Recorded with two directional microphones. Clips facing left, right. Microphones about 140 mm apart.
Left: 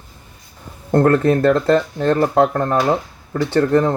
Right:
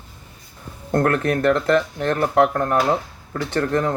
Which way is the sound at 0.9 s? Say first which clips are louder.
Left 5 dB; 30° left (ahead or behind).